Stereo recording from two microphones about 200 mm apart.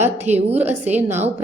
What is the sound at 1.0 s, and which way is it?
Speech, 10° right (ahead or behind).